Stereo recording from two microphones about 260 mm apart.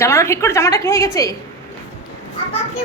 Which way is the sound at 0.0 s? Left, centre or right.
Centre.